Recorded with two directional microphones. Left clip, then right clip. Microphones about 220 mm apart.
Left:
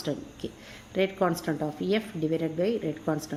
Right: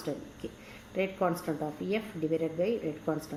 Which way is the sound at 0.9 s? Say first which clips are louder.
Left 4 dB; 45° left (ahead or behind).